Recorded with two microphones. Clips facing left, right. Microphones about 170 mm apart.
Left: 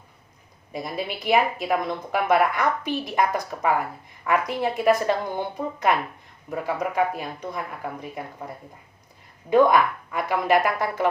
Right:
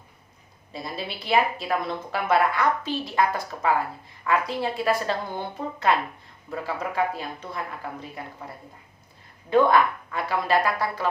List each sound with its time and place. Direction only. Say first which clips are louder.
0.7 s a woman's voice: left 4 dB; 15° left (ahead or behind)
9.5 s a woman's voice: left 2 dB; 15° left (ahead or behind)